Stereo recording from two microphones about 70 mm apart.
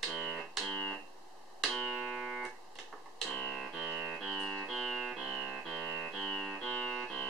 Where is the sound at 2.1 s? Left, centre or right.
Centre.